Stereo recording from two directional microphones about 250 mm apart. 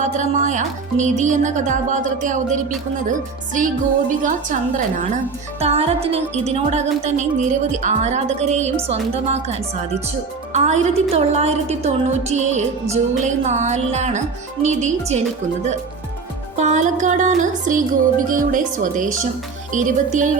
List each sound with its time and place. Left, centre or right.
0.0 s speech: right
16.6 s speech: right